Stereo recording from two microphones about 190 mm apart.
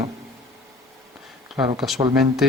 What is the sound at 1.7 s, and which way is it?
Speech, centre (ahead or behind).